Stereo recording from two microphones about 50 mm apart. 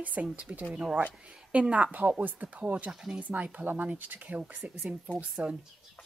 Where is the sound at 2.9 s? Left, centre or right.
Centre.